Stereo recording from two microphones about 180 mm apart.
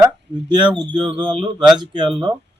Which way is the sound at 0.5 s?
25° right (ahead or behind).